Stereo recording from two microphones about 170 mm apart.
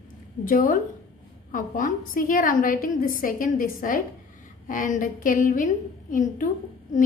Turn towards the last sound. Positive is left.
turn(degrees=50)  # may be behind; listen again after turning